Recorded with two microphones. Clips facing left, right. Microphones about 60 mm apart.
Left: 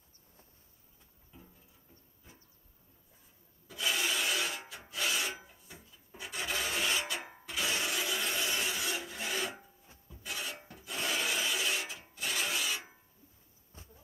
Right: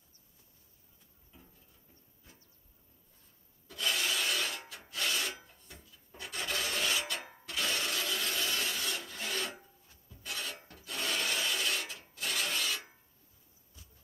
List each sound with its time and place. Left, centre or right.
1.3 s music: centre
3.6 s rub: centre
10.2 s filing: centre
13.7 s a sound: left